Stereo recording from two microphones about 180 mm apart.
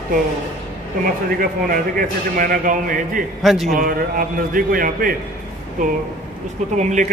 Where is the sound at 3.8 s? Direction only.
50° right (ahead or behind).